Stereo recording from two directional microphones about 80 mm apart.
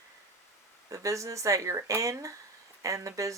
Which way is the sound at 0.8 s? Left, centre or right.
Right.